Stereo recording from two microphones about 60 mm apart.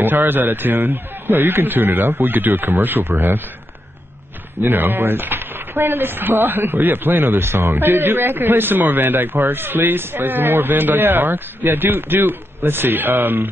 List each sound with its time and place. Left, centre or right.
0.0 s speech: right
4.6 s speech: right